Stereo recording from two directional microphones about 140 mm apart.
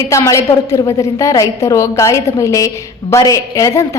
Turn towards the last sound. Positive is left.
turn(degrees=20)  # may be behind; listen again after turning